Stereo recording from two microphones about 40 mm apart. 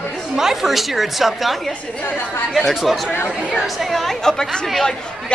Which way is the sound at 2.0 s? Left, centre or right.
Left.